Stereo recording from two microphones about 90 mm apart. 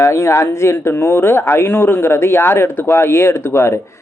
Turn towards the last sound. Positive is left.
turn(degrees=30)  # may be behind; listen again after turning